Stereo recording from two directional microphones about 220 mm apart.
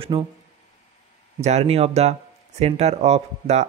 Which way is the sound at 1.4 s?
30° right (ahead or behind).